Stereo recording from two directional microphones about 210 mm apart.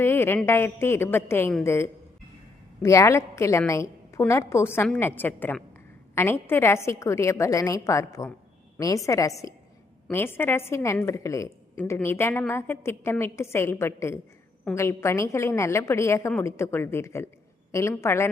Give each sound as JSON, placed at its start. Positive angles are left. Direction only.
{"t": 0.0, "sound": "a woman's voice", "side_deg": 10}